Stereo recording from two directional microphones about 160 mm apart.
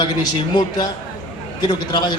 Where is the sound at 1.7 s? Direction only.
25° left (ahead or behind).